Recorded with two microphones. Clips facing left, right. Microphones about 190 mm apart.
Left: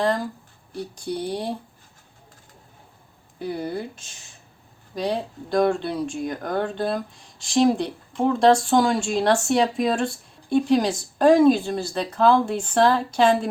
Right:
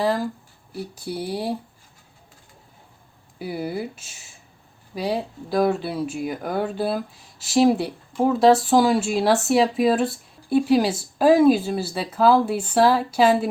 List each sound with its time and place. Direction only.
0.0 s speech: 5° right (ahead or behind)
3.3 s speech: 5° right (ahead or behind)